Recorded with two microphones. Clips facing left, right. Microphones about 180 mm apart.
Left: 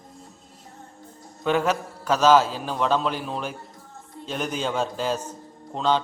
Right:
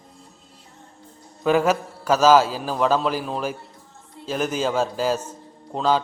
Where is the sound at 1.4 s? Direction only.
5° right (ahead or behind).